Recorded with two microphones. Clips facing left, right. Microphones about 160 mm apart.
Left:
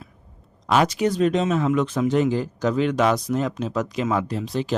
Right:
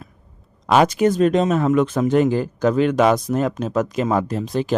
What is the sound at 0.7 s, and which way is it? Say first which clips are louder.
Speech: right 4 dB; 50° right (ahead or behind).